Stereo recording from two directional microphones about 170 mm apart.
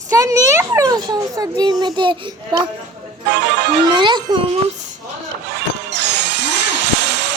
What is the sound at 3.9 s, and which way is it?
Speech, 25° right (ahead or behind).